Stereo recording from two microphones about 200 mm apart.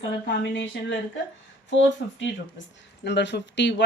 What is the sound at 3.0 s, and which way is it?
Speech, 60° left (ahead or behind).